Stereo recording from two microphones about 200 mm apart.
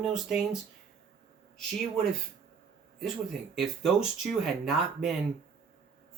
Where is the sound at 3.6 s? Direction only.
Centre (ahead or behind).